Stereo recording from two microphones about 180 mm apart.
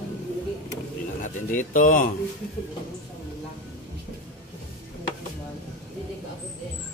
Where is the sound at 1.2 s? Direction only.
45° left (ahead or behind).